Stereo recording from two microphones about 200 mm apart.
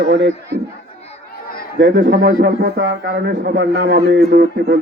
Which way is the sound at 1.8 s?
50° right (ahead or behind).